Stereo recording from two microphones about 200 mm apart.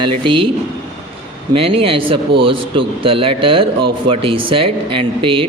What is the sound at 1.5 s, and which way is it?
Speech, 30° right (ahead or behind).